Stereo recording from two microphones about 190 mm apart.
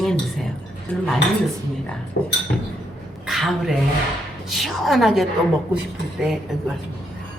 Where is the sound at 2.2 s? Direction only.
55° left (ahead or behind).